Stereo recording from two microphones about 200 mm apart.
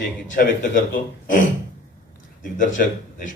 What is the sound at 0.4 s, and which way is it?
Speech, 50° left (ahead or behind).